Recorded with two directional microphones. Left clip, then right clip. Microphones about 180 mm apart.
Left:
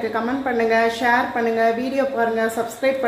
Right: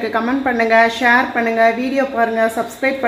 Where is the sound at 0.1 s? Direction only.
45° right (ahead or behind).